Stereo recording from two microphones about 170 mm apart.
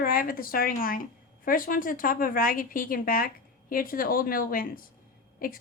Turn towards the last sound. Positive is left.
turn(degrees=55)  # may be behind; listen again after turning